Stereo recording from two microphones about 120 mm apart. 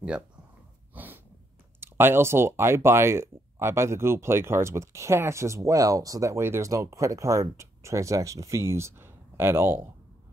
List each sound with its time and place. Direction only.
0.9 s snort: 15° right (ahead or behind)
1.8 s speech: 20° right (ahead or behind)